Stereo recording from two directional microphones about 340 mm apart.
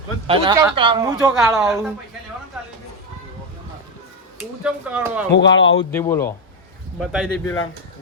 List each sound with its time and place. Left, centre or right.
0.3 s speech: centre
4.6 s speech: centre
5.5 s speech: left
5.9 s speech: centre